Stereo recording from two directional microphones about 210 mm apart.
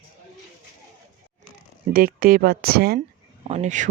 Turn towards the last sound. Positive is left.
turn(degrees=-35)  # may be behind; listen again after turning